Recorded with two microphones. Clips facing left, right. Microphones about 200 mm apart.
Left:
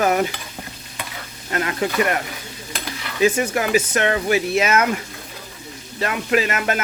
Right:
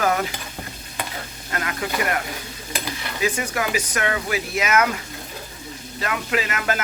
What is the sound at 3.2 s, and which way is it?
Music, 25° left (ahead or behind).